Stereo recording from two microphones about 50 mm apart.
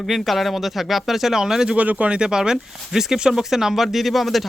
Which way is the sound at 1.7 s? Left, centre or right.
Right.